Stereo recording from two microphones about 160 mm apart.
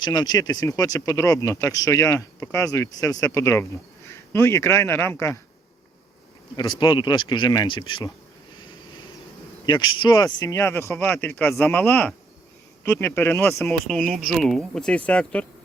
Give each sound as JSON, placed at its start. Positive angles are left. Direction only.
{"t": 0.0, "sound": "speech", "side_deg": 25}
{"t": 6.6, "sound": "speech", "side_deg": 30}
{"t": 9.6, "sound": "speech", "side_deg": 30}